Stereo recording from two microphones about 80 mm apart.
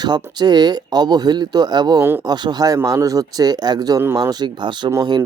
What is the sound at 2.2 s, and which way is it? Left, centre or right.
Speech, right.